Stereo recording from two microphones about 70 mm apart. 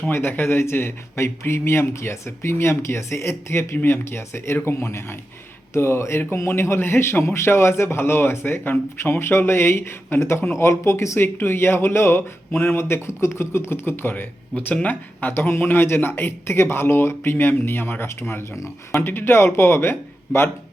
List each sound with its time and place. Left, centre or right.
0.1 s speech: left